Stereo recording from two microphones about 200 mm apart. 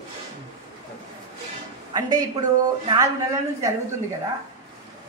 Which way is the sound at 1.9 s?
20° right (ahead or behind).